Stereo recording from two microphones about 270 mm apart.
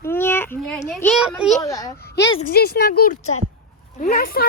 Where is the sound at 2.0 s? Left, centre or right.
Left.